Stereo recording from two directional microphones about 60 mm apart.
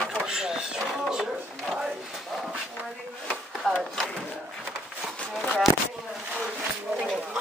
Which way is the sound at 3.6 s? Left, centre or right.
Centre.